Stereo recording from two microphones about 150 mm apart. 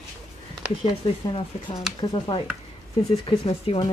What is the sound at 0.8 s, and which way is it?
Speech, 35° left (ahead or behind).